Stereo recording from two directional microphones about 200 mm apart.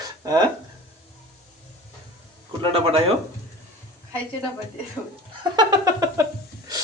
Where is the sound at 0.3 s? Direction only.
20° right (ahead or behind).